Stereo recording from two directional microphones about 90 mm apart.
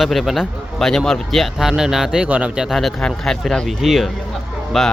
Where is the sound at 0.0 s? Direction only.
Centre (ahead or behind).